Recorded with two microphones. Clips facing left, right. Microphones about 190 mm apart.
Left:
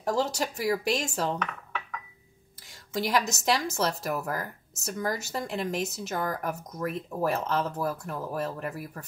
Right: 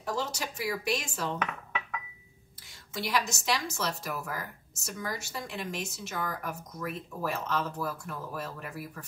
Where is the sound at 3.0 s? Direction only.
45° left (ahead or behind).